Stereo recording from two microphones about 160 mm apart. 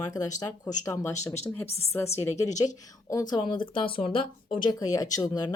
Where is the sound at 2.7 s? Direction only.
20° left (ahead or behind).